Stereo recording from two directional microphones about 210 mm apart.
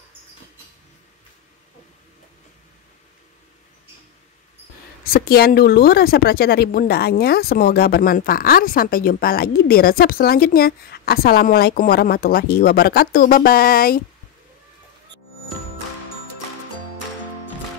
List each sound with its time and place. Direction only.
5.1 s speech: 45° left (ahead or behind)